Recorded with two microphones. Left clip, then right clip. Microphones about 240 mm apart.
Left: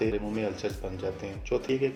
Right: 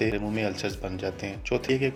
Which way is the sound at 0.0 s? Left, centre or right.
Right.